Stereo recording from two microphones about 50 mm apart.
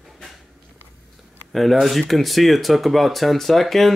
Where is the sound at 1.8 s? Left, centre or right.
Centre.